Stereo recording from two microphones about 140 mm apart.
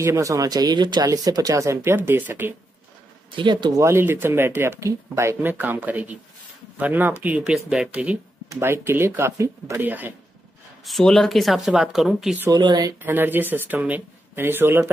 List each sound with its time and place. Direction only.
0.0 s speech: 25° right (ahead or behind)
3.3 s speech: 35° right (ahead or behind)
3.8 s speech: 15° right (ahead or behind)
10.9 s speech: centre (ahead or behind)
12.4 s speech: 30° right (ahead or behind)
13.0 s speech: 15° right (ahead or behind)